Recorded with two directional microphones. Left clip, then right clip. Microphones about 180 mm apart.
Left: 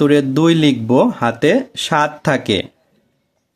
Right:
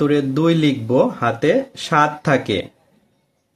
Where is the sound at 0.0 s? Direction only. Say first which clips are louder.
Left 4 dB; 45° left (ahead or behind).